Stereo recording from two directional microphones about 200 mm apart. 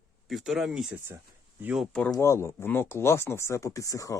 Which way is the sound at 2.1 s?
15° left (ahead or behind).